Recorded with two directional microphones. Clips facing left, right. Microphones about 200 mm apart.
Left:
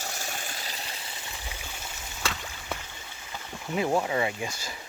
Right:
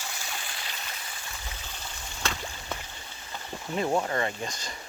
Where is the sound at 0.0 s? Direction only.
45° left (ahead or behind); by 1.1 s 30° left (ahead or behind).